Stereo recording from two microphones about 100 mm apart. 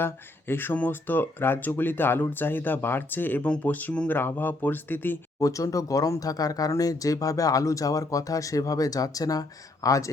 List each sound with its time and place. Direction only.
0.0 s speech: 20° left (ahead or behind)
5.4 s speech: 35° left (ahead or behind)